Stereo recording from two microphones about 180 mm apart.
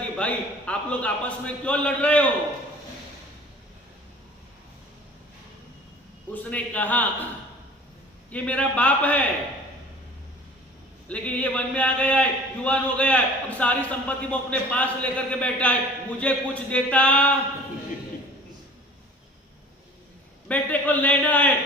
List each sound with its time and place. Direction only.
0.2 s a man's voice: 5° left (ahead or behind)
6.3 s a man's voice: 10° left (ahead or behind)
8.3 s a man's voice: 5° left (ahead or behind)
11.1 s a man's voice: 5° left (ahead or behind)
20.5 s a man's voice: 10° left (ahead or behind)